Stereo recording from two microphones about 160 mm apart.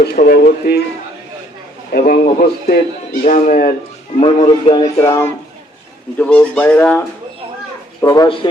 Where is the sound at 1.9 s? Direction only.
65° left (ahead or behind).